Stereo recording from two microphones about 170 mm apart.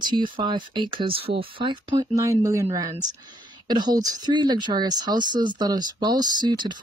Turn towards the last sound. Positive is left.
turn(degrees=-25)  # may be behind; listen again after turning